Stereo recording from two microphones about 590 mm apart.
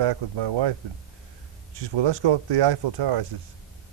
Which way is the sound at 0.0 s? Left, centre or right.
Right.